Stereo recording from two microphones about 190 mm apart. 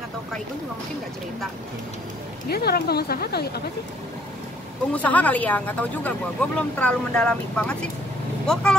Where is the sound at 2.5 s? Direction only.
55° left (ahead or behind).